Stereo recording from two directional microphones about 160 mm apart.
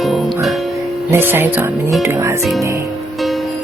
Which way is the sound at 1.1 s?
15° right (ahead or behind).